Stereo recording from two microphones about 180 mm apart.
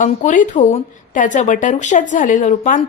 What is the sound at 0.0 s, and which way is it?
Speech, 45° left (ahead or behind).